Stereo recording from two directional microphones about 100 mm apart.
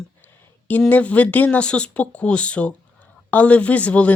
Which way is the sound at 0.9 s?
15° left (ahead or behind).